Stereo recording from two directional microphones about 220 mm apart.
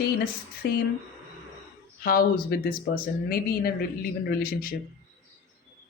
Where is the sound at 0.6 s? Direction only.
50° left (ahead or behind).